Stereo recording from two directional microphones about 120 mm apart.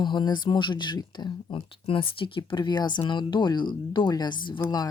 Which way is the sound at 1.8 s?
50° left (ahead or behind).